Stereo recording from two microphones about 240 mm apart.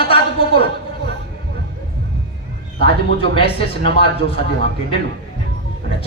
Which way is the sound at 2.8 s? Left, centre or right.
Left.